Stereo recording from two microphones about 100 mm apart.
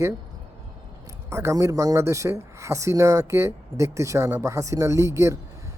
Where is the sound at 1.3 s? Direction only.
25° right (ahead or behind).